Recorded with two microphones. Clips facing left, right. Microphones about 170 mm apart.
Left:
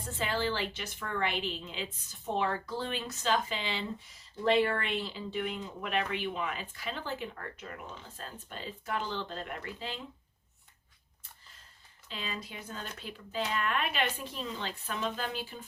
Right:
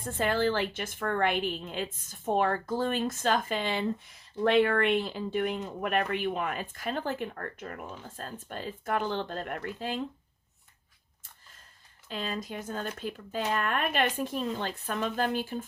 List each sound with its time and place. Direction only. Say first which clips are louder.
0.0 s a woman's voice: right 6 dB; 50° right (ahead or behind)
12.0 s a woman's voice: right 6 dB; 50° right (ahead or behind)